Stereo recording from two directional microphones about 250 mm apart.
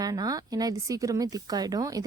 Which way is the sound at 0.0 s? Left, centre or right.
Centre.